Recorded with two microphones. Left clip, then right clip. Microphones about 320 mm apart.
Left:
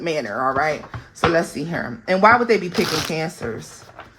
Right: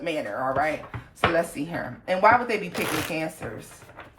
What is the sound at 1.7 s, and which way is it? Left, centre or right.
Speech, left.